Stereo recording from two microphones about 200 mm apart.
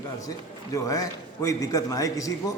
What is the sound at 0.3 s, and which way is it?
A man's voice, 15° left (ahead or behind).